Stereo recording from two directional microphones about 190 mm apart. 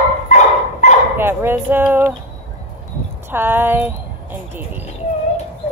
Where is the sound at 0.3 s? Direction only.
40° left (ahead or behind).